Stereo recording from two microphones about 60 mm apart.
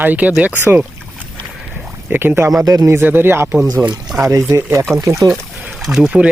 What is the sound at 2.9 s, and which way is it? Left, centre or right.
Speech, right.